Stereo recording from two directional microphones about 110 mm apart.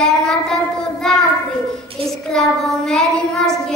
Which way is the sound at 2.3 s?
5° left (ahead or behind).